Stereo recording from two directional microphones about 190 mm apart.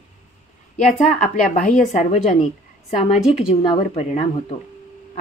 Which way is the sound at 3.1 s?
Centre (ahead or behind).